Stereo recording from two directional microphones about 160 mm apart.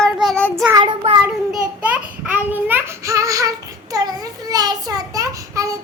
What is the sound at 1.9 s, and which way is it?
A child's voice, 10° right (ahead or behind).